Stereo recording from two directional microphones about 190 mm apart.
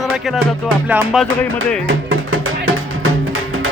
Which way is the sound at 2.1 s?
90° right.